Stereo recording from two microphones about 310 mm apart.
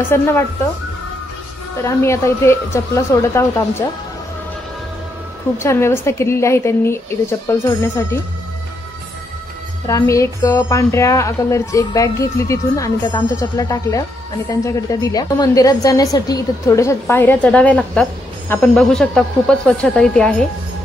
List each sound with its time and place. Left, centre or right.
0.1 s a woman's voice: centre
1.8 s a woman's voice: centre
5.6 s a woman's voice: centre
9.8 s a woman's voice: centre